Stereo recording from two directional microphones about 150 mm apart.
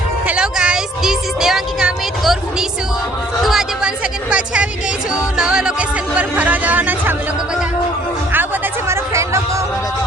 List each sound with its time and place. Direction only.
0.3 s a woman's voice: 5° right (ahead or behind)
8.9 s chatter: 20° right (ahead or behind)